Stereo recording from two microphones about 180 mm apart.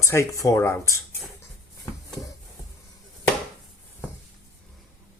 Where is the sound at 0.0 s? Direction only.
15° left (ahead or behind).